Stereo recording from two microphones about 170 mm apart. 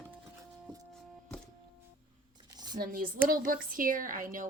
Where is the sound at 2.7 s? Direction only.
55° right (ahead or behind).